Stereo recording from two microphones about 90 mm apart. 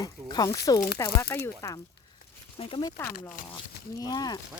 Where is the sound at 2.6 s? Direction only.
90° left.